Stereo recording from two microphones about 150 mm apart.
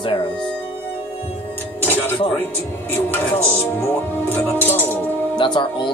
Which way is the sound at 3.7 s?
15° left (ahead or behind).